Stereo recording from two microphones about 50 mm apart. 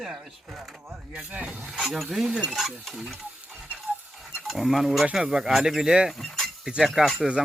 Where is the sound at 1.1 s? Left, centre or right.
Right.